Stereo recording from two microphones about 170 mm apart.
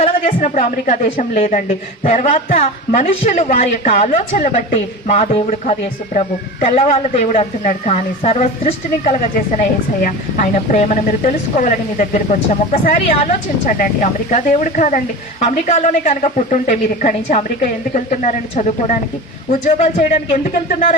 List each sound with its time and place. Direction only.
0.3 s a woman's voice: 45° left (ahead or behind)